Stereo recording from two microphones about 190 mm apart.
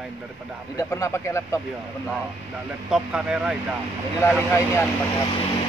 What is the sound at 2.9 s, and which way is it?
Speech, 5° right (ahead or behind).